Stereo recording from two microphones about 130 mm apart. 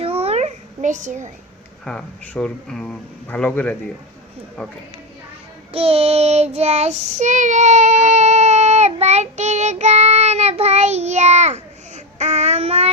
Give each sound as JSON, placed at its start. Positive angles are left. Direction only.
{"t": 0.0, "sound": "babbling", "side_deg": -50}
{"t": 1.8, "sound": "speech", "side_deg": 5}
{"t": 5.7, "sound": "child singing", "side_deg": -50}